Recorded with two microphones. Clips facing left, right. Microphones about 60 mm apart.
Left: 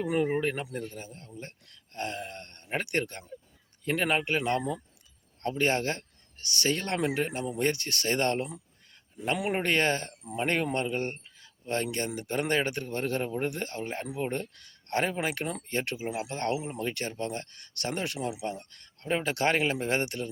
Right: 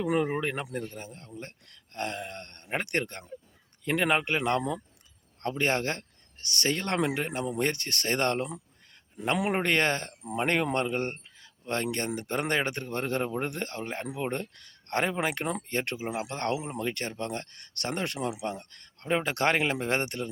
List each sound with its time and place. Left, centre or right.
0.0 s speech: right
0.4 s speech: right